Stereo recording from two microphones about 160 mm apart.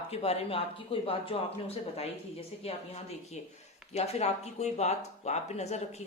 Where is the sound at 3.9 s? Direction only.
40° left (ahead or behind).